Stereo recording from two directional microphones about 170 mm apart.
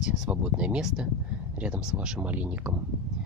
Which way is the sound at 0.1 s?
5° right (ahead or behind).